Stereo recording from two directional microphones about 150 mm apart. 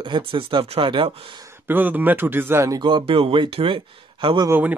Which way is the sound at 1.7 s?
10° right (ahead or behind).